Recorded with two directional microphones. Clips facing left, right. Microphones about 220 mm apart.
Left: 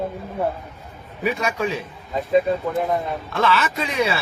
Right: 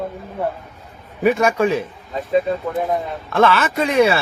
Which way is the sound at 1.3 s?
50° right (ahead or behind).